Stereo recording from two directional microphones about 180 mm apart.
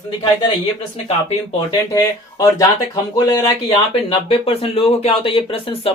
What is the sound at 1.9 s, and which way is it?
Speech, 20° left (ahead or behind).